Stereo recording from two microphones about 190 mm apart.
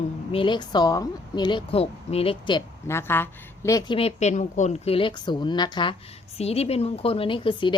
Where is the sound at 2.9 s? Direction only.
10° left (ahead or behind).